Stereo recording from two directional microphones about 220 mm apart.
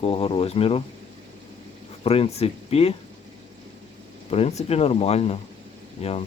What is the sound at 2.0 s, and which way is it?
Speech, 25° left (ahead or behind).